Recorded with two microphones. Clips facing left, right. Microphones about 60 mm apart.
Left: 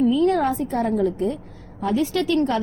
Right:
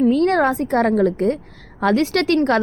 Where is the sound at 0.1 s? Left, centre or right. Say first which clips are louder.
Right 3 dB; right.